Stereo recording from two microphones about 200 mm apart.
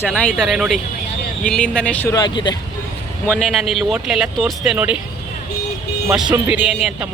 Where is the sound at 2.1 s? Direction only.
20° left (ahead or behind).